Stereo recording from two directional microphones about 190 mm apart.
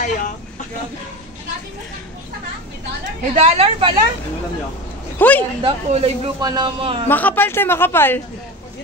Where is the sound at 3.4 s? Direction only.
35° right (ahead or behind).